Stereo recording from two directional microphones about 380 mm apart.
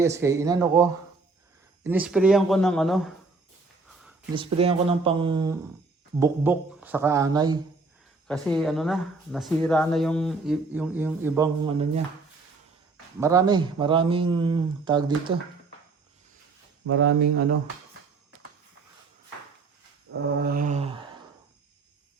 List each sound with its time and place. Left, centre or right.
0.0 s speech: centre
4.4 s speech: centre
8.3 s speech: centre
13.1 s speech: centre
16.8 s mantra: right
20.1 s mantra: right
20.4 s mantra: right